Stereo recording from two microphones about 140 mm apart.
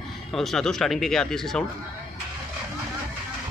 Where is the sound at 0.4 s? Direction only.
5° left (ahead or behind).